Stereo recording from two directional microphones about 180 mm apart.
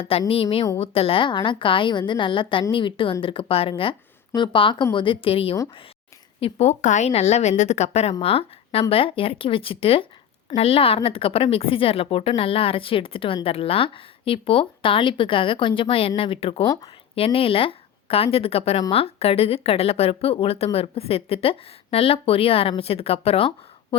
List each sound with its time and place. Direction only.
0.0 s speech: 30° left (ahead or behind)